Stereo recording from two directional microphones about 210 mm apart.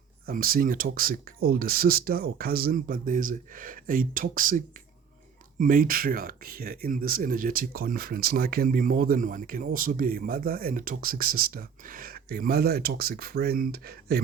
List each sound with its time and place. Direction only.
0.3 s speech: 45° right (ahead or behind)